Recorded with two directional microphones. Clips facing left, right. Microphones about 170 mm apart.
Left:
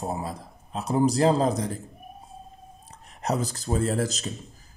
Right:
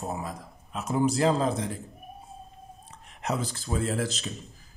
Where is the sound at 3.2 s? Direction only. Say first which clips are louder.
Left 3 dB; 40° left (ahead or behind).